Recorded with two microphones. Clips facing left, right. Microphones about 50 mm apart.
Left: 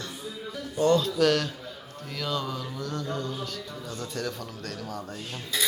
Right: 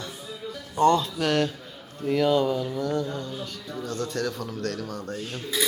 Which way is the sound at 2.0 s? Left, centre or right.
Centre.